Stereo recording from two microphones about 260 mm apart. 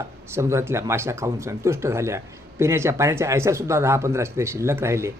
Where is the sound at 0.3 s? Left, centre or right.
Centre.